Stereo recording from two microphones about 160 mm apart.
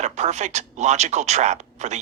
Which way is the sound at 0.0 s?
45° right (ahead or behind).